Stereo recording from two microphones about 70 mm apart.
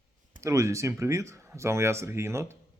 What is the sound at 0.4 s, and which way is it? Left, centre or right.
Speech, right.